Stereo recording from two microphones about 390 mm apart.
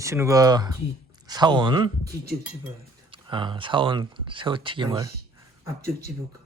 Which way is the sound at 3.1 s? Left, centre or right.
Centre.